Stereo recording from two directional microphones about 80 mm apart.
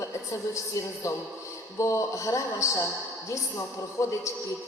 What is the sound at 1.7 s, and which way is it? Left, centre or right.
A woman's voice, left.